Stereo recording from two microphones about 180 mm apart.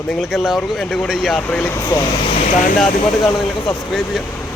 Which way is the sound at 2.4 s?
45° left (ahead or behind).